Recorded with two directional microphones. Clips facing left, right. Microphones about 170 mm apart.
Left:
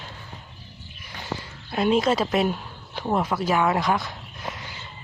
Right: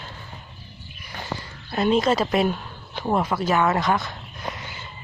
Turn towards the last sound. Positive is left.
turn(degrees=0)  # may be behind; listen again after turning